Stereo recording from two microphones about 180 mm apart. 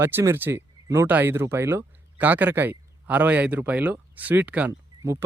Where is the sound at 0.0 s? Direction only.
15° right (ahead or behind).